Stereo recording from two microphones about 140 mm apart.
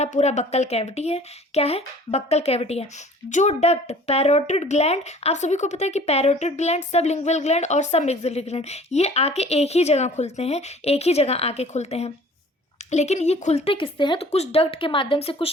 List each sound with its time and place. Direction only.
0.0 s speech: 55° left (ahead or behind); by 14.3 s 35° left (ahead or behind)
14.3 s speech: 50° left (ahead or behind)